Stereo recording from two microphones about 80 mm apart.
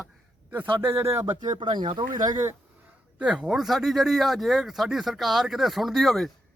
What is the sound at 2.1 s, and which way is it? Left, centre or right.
Speech, right.